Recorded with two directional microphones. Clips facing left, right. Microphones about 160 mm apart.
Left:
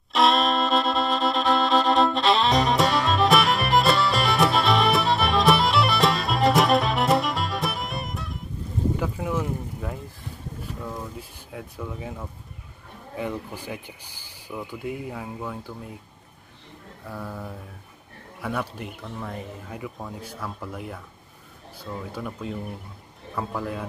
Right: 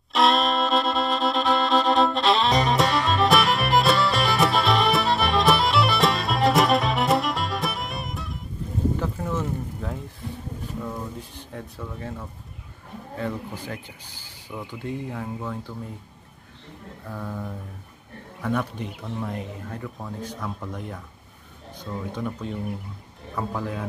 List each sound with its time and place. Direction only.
0.1 s music: centre (ahead or behind)
9.0 s boat: 10° left (ahead or behind)
10.8 s a sound: 5° left (ahead or behind)
13.2 s speech: 10° left (ahead or behind)
17.0 s speech: 5° left (ahead or behind)